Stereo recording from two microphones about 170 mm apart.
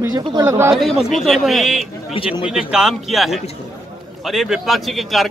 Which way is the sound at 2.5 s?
5° right (ahead or behind).